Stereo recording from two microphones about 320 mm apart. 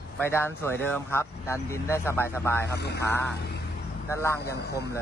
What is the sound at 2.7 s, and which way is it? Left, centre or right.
Speech, left.